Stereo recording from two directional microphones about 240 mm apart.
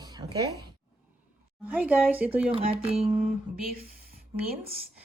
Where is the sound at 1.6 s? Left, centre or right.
Centre.